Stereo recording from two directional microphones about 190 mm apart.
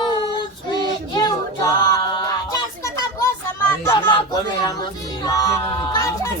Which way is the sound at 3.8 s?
20° left (ahead or behind).